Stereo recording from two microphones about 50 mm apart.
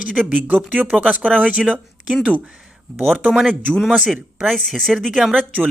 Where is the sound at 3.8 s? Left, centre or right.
Centre.